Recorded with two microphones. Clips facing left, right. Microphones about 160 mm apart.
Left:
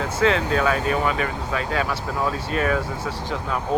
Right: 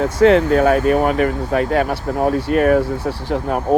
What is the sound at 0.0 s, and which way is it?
Speech, 55° right (ahead or behind).